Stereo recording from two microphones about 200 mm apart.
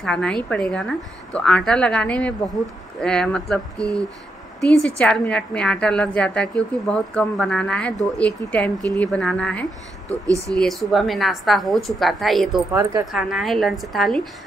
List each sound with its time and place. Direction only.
0.0 s a woman's voice: 5° left (ahead or behind)
10.0 s speech: 15° right (ahead or behind)
10.5 s a woman's voice: centre (ahead or behind)